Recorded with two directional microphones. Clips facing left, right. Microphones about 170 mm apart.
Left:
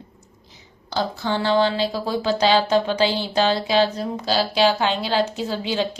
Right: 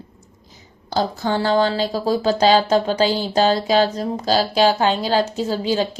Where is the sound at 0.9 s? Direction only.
45° right (ahead or behind).